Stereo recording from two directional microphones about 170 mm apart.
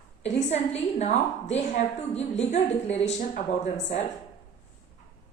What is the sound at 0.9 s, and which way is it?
A woman's voice, 40° left (ahead or behind).